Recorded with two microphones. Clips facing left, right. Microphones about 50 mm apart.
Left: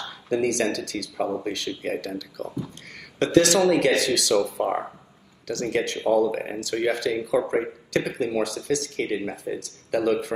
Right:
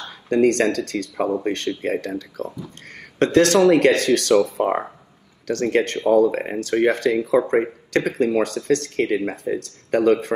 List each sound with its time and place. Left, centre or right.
0.0 s speech: right